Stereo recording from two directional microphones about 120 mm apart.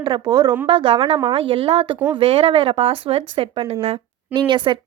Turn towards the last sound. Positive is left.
turn(degrees=-40)  # may be behind; listen again after turning